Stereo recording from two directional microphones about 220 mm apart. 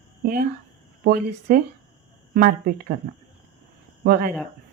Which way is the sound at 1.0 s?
45° right (ahead or behind).